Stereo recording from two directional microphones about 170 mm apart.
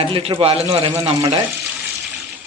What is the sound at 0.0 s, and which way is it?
Speech, 35° right (ahead or behind).